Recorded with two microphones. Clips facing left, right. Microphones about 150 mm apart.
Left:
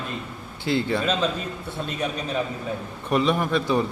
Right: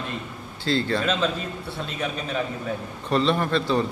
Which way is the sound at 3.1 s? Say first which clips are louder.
Even; 10° left (ahead or behind).